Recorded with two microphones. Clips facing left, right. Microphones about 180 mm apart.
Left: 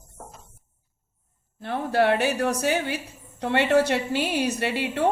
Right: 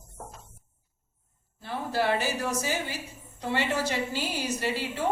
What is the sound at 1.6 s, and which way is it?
A woman's voice, 65° left (ahead or behind).